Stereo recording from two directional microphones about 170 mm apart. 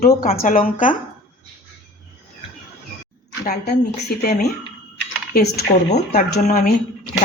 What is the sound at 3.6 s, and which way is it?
Speech, 70° left (ahead or behind).